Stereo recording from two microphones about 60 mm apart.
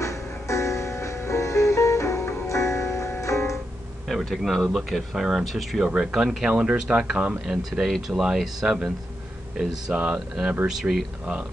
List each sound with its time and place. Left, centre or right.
0.0 s music: left
4.1 s speech: centre
6.5 s speech: right
7.4 s speech: centre
9.9 s speech: right
10.8 s speech: centre